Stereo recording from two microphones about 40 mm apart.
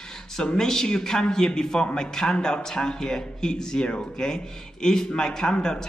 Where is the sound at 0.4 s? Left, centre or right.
Centre.